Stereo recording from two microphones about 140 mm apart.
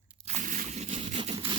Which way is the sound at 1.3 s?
35° right (ahead or behind).